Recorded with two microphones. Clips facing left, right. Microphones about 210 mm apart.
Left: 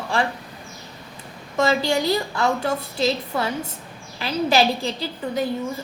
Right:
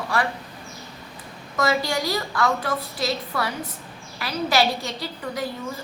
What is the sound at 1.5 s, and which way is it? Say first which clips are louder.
A woman's voice: left 3 dB; 25° left (ahead or behind).